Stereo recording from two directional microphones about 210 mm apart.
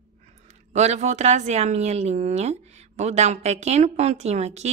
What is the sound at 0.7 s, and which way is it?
A woman's voice, 30° right (ahead or behind).